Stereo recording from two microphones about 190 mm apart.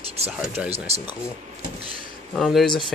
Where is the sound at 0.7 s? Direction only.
35° right (ahead or behind).